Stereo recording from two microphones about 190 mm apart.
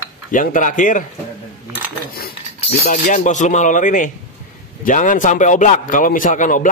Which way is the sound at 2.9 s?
40° left (ahead or behind).